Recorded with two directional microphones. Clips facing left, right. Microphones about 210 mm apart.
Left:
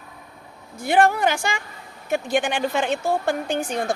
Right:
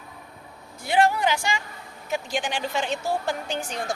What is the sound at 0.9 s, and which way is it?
A woman's voice, 50° left (ahead or behind).